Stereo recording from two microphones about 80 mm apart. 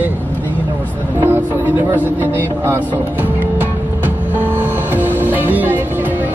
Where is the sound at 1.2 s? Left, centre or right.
Right.